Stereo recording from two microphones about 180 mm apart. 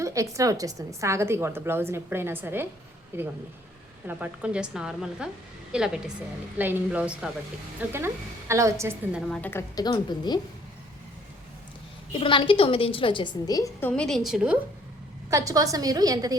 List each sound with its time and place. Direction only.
0.0 s a woman's voice: 20° right (ahead or behind)
9.3 s a woman's voice: 10° left (ahead or behind)
12.2 s a woman's voice: 30° left (ahead or behind); by 14.6 s 5° right (ahead or behind)
15.3 s a woman's voice: 20° right (ahead or behind)